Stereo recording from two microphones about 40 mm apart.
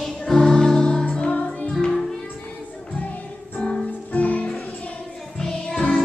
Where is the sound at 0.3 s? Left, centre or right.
Centre.